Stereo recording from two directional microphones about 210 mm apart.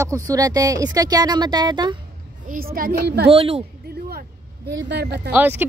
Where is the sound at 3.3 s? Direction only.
30° right (ahead or behind).